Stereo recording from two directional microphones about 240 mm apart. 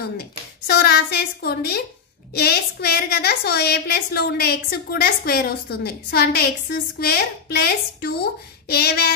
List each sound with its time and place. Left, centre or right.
0.0 s a woman's voice: left